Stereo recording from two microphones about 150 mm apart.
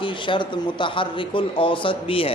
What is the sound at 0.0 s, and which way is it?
Speech, 35° left (ahead or behind).